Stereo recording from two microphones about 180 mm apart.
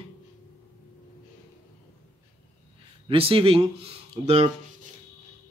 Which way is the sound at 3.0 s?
30° right (ahead or behind).